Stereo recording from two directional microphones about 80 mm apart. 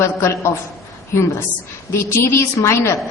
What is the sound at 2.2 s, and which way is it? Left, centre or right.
Speech, left.